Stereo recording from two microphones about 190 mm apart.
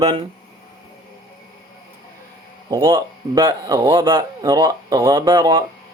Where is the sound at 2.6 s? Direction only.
20° right (ahead or behind).